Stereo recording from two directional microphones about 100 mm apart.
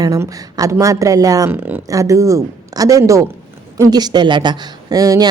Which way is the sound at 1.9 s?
35° right (ahead or behind).